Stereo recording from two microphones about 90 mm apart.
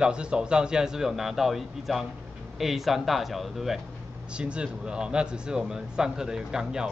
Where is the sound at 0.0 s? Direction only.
10° right (ahead or behind).